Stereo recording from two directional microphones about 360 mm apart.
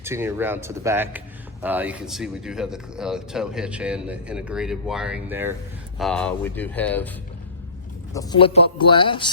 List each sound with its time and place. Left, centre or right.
0.0 s speech: centre
8.1 s speech: centre